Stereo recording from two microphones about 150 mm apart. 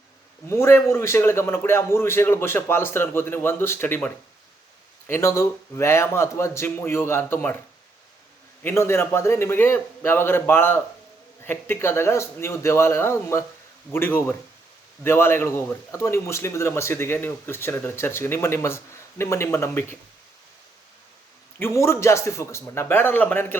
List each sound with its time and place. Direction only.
0.4 s speech: 20° left (ahead or behind)
8.6 s speech: 15° left (ahead or behind)
21.6 s speech: 15° left (ahead or behind)